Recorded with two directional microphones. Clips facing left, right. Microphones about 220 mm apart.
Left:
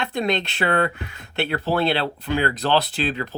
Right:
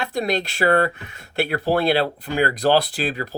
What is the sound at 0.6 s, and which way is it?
Speech, 35° right (ahead or behind).